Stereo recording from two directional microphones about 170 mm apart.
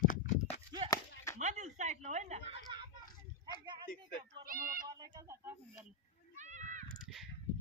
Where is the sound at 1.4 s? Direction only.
45° right (ahead or behind).